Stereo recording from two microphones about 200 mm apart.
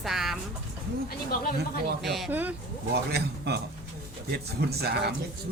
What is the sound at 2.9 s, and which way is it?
A man's voice, 55° right (ahead or behind).